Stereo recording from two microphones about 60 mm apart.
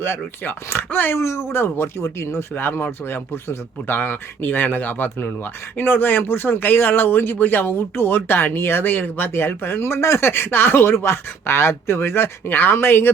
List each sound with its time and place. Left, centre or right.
0.0 s speech: left
1.2 s speech: left